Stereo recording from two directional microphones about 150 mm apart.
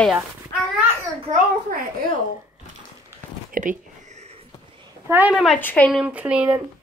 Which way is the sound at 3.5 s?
70° right (ahead or behind).